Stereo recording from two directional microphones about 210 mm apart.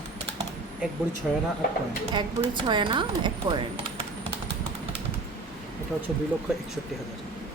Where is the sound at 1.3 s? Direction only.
5° right (ahead or behind).